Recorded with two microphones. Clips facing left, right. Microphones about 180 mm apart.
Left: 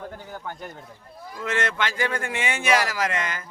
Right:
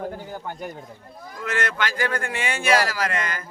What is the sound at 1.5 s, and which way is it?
Speech, 25° left (ahead or behind).